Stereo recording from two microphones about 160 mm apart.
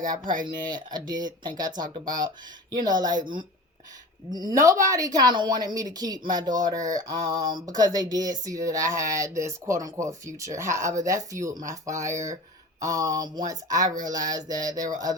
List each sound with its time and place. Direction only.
0.0 s speech: 55° right (ahead or behind)
0.4 s speech: 25° right (ahead or behind)
4.3 s speech: 25° right (ahead or behind)